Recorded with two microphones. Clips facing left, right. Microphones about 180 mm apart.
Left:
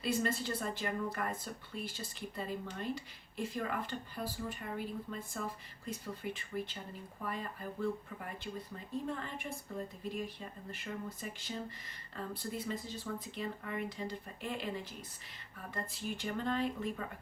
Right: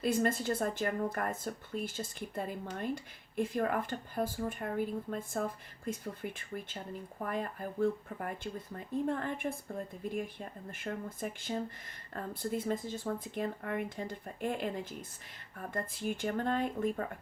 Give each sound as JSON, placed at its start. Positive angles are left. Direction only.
{"t": 0.0, "sound": "a woman's voice", "side_deg": -50}